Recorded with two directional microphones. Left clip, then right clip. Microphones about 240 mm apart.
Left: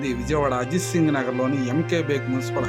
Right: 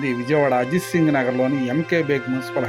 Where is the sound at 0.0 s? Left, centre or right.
Centre.